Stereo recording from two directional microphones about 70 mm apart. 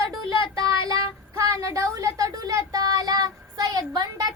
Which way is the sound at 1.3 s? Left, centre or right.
Right.